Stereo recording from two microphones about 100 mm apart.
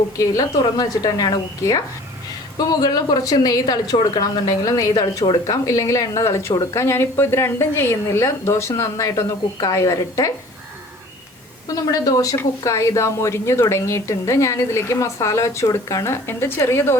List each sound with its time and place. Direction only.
0.8 s speech: 40° left (ahead or behind)
5.6 s a woman's voice: 30° left (ahead or behind)
11.7 s a woman's voice: 35° left (ahead or behind)